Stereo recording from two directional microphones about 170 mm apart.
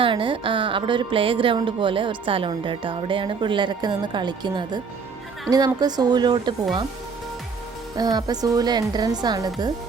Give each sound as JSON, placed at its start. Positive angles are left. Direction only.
{"t": 0.0, "sound": "speech", "side_deg": -30}
{"t": 7.9, "sound": "speech", "side_deg": -25}